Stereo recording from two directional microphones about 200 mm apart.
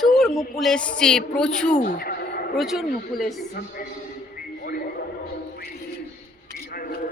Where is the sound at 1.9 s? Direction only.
50° left (ahead or behind).